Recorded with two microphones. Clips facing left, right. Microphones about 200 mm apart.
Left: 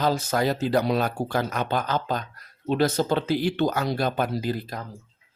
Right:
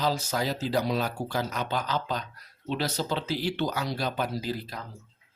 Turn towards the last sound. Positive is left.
turn(degrees=50)  # may be behind; listen again after turning